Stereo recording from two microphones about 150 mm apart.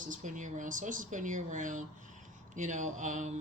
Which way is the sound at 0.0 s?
60° right (ahead or behind).